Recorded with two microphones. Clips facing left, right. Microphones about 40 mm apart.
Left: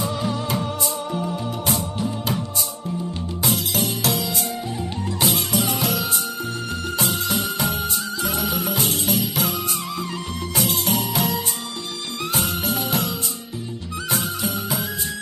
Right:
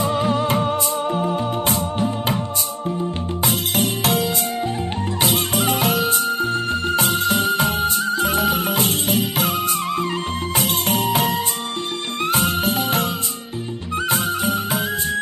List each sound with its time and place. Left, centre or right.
0.0 s music: right
3.4 s music: right
14.1 s music: right